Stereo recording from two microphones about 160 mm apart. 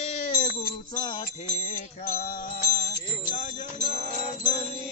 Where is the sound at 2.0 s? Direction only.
65° left (ahead or behind).